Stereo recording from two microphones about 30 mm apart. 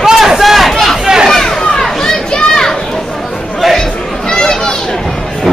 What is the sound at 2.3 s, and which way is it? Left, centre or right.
Children playing, left.